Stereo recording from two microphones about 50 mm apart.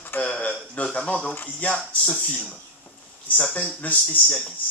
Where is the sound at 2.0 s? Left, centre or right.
Centre.